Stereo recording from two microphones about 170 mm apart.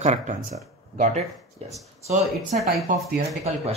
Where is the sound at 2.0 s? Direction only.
45° right (ahead or behind).